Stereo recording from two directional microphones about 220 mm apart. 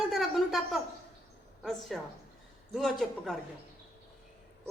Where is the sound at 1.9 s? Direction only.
Centre (ahead or behind).